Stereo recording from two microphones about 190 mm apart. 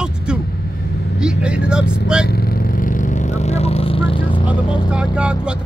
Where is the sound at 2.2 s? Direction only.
55° left (ahead or behind); by 4.8 s 25° left (ahead or behind).